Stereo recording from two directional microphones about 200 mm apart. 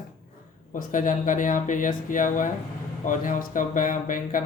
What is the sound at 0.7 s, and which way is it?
Speech, 40° left (ahead or behind).